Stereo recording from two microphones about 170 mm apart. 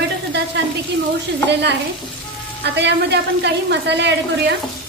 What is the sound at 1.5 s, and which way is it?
Stir, 85° right.